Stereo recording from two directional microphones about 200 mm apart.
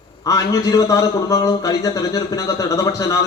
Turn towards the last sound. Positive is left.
turn(degrees=15)  # may be behind; listen again after turning